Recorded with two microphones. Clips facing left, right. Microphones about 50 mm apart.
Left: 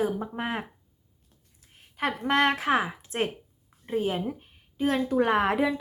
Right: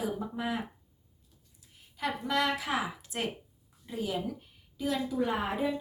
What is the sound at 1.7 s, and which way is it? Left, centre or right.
A woman's voice, left.